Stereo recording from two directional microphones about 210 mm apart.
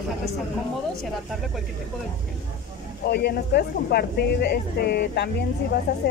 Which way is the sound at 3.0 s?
50° left (ahead or behind).